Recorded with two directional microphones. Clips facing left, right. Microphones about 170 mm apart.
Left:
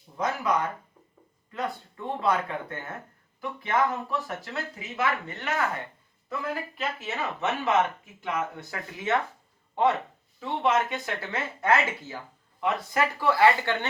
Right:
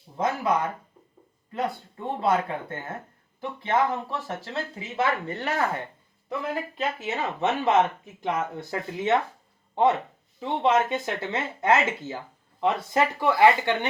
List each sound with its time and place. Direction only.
1.5 s speech: 25° right (ahead or behind)
6.2 s speech: 20° right (ahead or behind)